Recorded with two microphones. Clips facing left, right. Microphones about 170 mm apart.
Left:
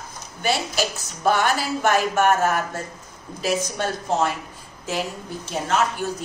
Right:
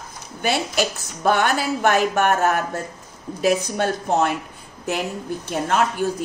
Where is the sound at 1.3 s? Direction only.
55° right (ahead or behind).